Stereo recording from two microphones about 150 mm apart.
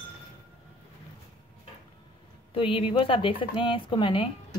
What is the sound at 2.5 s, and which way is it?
Speech, 35° left (ahead or behind).